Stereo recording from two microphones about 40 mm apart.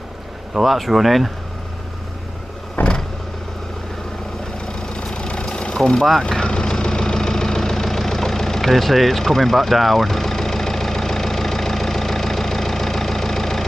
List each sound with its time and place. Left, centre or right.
0.6 s speech: centre
2.8 s vehicle: left
4.6 s vehicle: left